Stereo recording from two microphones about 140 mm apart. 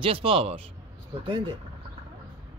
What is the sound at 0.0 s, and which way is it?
Speech, 40° right (ahead or behind).